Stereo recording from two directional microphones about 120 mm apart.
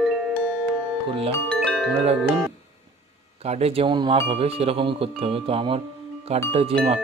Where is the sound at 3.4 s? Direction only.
60° right (ahead or behind).